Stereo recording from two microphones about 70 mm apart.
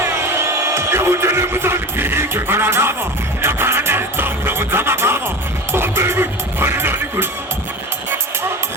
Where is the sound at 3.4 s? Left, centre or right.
Right.